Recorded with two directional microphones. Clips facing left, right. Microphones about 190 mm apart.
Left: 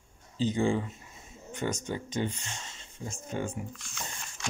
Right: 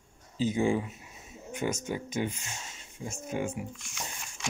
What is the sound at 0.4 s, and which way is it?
Speech, 10° right (ahead or behind).